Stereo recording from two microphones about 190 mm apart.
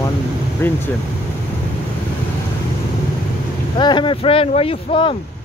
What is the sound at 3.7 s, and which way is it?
Speech, 25° left (ahead or behind).